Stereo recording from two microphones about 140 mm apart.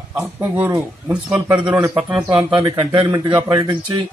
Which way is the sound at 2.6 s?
25° right (ahead or behind).